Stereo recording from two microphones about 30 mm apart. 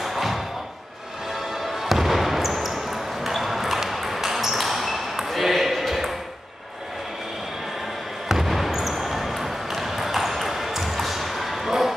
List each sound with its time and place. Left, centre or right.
0.0 s music: centre
1.8 s basketball bounce: centre
5.3 s ping: centre
8.3 s basketball bounce: centre